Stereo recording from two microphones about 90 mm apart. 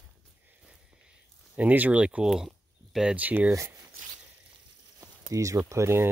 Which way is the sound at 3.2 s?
20° right (ahead or behind).